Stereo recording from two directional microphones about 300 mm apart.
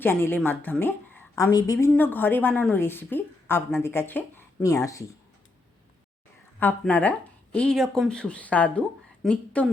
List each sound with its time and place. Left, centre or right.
0.0 s a woman's voice: centre
6.6 s speech: centre